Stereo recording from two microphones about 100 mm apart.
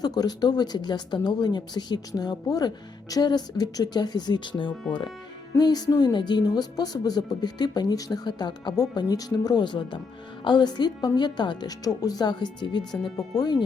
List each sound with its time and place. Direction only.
0.0 s speech: 40° left (ahead or behind)
5.5 s speech: 40° left (ahead or behind)